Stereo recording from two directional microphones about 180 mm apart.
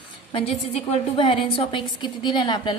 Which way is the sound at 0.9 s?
30° left (ahead or behind).